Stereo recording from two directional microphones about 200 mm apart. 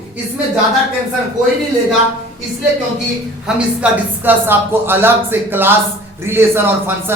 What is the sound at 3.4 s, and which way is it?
Speech, 10° right (ahead or behind).